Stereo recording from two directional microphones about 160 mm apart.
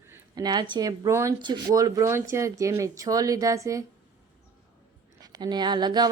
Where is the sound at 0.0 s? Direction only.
20° right (ahead or behind).